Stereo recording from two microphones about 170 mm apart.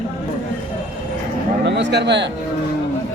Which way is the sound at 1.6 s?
90° right.